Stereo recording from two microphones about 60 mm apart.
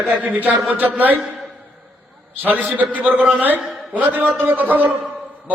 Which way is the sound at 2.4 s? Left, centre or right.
Right.